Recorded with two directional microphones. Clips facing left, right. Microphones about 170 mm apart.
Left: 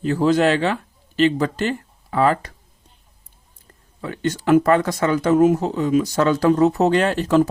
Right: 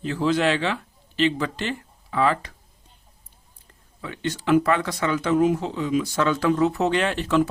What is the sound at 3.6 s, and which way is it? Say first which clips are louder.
Speech: left 6 dB; 45° left (ahead or behind).